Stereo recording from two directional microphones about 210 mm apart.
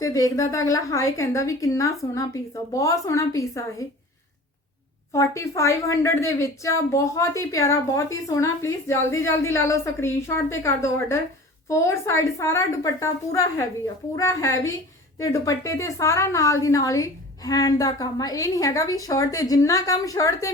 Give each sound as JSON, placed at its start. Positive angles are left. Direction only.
{"t": 0.0, "sound": "a woman's voice", "side_deg": 15}
{"t": 5.1, "sound": "a woman's voice", "side_deg": 15}